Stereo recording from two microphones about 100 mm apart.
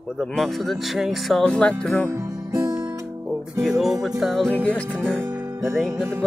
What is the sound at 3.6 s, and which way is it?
Music, centre (ahead or behind).